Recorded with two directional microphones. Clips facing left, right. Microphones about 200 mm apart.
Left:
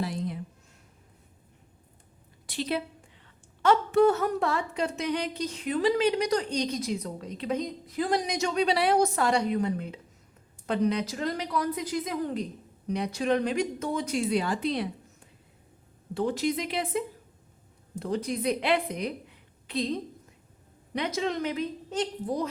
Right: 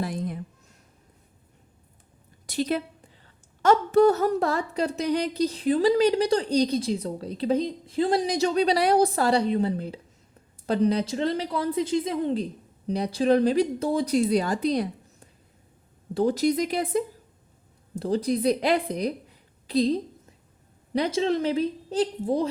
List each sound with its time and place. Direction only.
0.0 s a sound: 50° right (ahead or behind)
2.5 s a woman's voice: 45° right (ahead or behind)
16.1 s a woman's voice: 40° right (ahead or behind)